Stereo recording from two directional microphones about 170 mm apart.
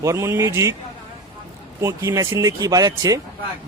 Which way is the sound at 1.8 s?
20° right (ahead or behind).